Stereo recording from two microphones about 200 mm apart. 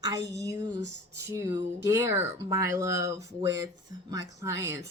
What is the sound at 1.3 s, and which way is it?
Speech, 10° right (ahead or behind).